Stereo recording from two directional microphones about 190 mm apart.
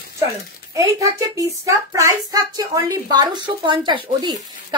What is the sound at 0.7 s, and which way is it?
A child's voice, 15° right (ahead or behind).